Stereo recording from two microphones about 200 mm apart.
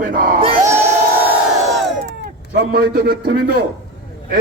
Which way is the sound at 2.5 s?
50° right (ahead or behind).